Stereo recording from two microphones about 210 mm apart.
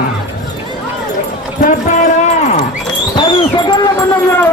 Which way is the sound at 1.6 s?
35° left (ahead or behind).